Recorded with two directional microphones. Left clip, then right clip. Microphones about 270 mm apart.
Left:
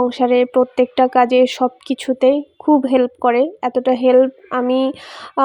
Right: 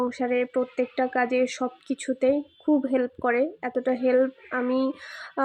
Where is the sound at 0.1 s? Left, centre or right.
Left.